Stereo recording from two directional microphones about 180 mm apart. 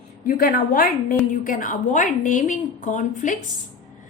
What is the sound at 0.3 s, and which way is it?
A woman's voice, 50° left (ahead or behind).